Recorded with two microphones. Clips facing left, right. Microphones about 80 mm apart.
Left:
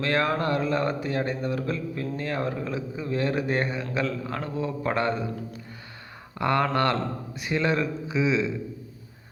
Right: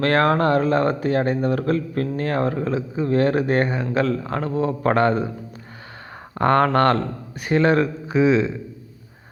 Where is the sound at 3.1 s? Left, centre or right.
Right.